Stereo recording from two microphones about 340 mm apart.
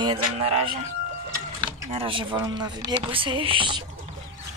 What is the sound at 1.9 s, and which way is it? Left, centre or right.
Speech, centre.